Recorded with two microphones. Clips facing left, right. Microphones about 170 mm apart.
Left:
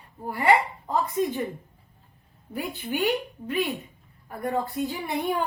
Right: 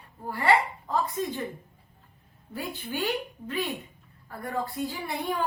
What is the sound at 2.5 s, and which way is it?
A woman's voice, 15° left (ahead or behind).